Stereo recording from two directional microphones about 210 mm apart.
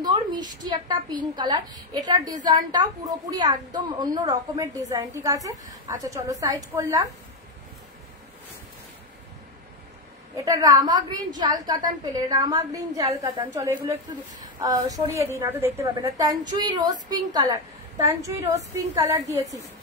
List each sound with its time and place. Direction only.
0.0 s a woman's voice: 20° right (ahead or behind)
10.4 s a woman's voice: 15° right (ahead or behind)